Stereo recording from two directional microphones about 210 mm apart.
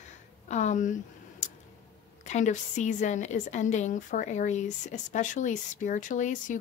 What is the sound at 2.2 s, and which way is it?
Speech, 35° left (ahead or behind).